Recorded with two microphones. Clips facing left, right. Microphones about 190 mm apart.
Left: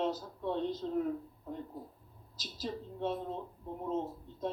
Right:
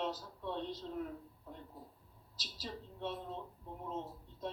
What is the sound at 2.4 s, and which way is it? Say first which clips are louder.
A man's voice: left 7 dB; 50° left (ahead or behind).